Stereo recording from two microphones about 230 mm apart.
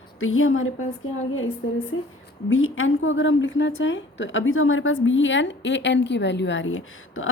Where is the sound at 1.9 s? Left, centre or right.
Left.